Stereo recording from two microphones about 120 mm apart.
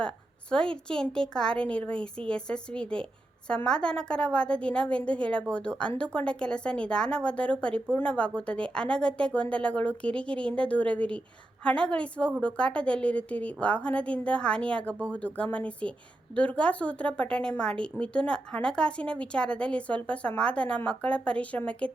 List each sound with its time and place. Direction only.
0.5 s a woman's voice: 5° left (ahead or behind)